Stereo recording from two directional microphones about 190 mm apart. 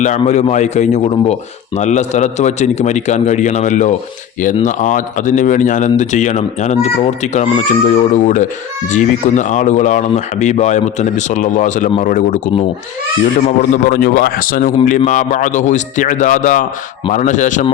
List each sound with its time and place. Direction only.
0.3 s a man's voice: 35° left (ahead or behind)
13.6 s a man's voice: 50° left (ahead or behind)